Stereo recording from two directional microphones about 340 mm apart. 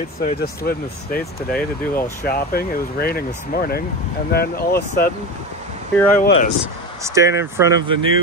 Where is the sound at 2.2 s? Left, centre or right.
Left.